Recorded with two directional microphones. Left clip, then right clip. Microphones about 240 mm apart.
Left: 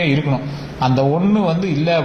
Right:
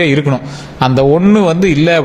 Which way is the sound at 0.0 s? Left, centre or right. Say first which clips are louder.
Right 6 dB; right.